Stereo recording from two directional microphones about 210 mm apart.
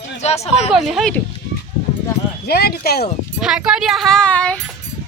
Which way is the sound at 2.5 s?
50° left (ahead or behind).